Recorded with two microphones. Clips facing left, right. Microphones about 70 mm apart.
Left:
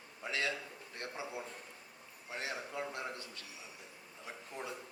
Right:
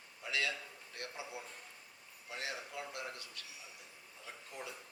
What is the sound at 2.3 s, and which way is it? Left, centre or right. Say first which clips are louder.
A man's voice: left 2 dB; left.